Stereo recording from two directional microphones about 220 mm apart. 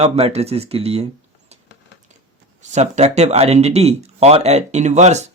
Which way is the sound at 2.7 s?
30° right (ahead or behind).